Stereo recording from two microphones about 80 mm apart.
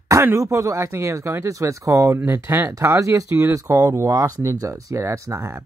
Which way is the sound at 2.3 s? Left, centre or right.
Right.